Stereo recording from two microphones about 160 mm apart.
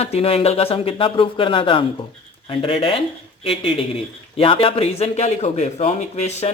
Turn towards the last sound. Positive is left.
turn(degrees=45)  # may be behind; listen again after turning